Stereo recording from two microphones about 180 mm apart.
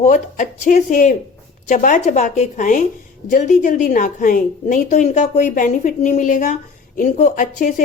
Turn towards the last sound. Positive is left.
turn(degrees=45)  # may be behind; listen again after turning